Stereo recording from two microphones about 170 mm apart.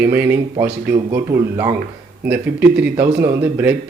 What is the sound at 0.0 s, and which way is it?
A man's voice, 10° right (ahead or behind).